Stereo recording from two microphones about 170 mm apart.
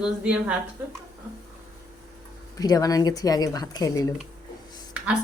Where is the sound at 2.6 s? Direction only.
20° left (ahead or behind).